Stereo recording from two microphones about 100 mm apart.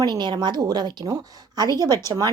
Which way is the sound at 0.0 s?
45° right (ahead or behind).